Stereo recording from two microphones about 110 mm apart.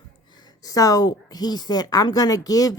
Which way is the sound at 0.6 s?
35° left (ahead or behind).